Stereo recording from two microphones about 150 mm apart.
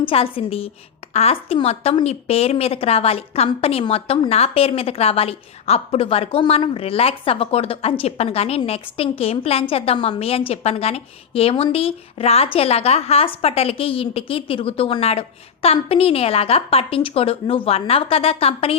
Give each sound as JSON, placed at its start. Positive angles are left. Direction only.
{"t": 0.0, "sound": "a woman's voice", "side_deg": 40}